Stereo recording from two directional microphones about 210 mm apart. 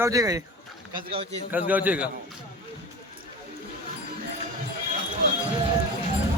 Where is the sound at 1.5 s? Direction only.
10° right (ahead or behind).